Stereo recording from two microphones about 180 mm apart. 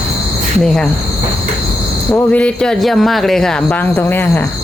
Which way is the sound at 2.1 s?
5° left (ahead or behind).